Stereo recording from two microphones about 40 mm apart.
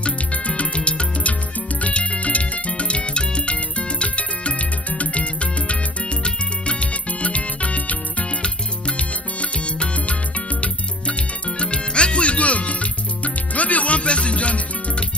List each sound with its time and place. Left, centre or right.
0.6 s music: left